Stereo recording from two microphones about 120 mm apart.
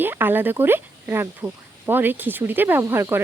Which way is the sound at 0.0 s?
15° right (ahead or behind).